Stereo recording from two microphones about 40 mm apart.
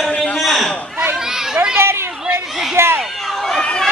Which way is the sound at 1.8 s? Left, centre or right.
Right.